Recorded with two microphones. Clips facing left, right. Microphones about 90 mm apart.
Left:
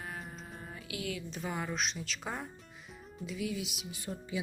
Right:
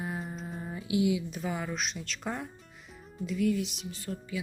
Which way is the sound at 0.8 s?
20° right (ahead or behind).